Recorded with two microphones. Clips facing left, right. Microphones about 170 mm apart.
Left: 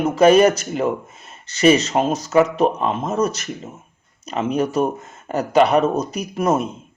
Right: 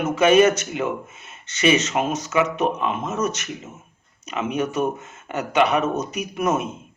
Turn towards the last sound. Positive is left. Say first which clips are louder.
# left 3 dB
turn(degrees=30)  # may be behind; listen again after turning